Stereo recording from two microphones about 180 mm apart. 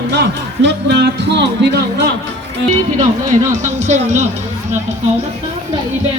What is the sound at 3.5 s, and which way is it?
Speech, 40° right (ahead or behind).